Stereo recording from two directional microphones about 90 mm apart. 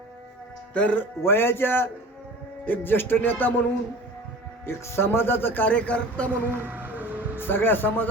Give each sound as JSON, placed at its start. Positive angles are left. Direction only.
{"t": 0.7, "sound": "speech", "side_deg": 15}
{"t": 1.2, "sound": "a man's voice", "side_deg": 25}
{"t": 4.6, "sound": "a man's voice", "side_deg": 30}
{"t": 6.5, "sound": "a sound", "side_deg": -20}
{"t": 7.3, "sound": "a man's voice", "side_deg": 25}